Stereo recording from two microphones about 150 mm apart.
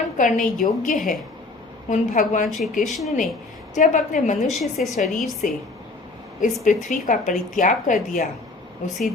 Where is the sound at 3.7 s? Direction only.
55° left (ahead or behind).